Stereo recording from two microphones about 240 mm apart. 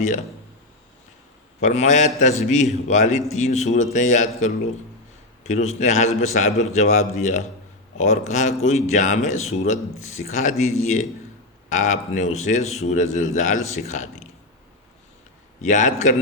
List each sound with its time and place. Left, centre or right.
1.6 s speech: left
15.6 s a man's voice: left